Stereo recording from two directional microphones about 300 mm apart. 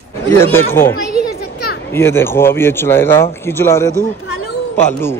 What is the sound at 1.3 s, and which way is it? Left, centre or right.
Children playing, left.